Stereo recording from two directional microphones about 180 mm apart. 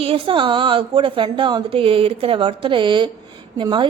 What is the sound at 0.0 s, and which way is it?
A woman's voice, 30° right (ahead or behind).